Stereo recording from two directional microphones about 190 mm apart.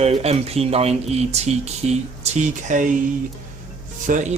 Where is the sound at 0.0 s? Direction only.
35° right (ahead or behind).